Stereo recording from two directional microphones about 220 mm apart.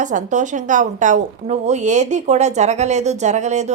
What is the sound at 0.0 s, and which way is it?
Speech, 35° right (ahead or behind).